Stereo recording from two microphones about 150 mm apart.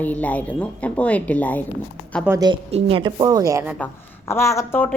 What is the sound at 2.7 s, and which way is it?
Speech, 35° right (ahead or behind).